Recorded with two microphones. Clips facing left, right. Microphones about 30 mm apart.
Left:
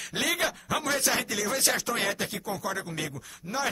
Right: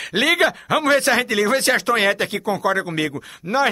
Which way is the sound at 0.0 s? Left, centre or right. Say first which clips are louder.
Right 11 dB; right.